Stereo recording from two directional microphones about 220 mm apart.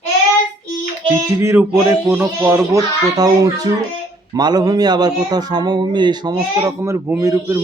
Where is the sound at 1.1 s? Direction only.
15° right (ahead or behind).